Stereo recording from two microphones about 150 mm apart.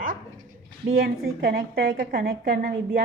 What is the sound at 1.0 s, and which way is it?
Speech, 85° right.